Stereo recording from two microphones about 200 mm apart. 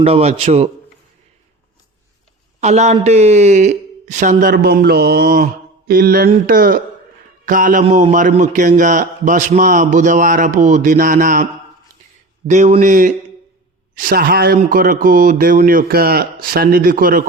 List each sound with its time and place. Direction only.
0.0 s a man's voice: 30° right (ahead or behind)
2.6 s a man's voice: 35° right (ahead or behind)
12.5 s a man's voice: 35° right (ahead or behind)